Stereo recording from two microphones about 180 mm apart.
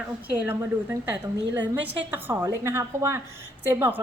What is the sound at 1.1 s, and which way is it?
A woman's voice, 10° right (ahead or behind).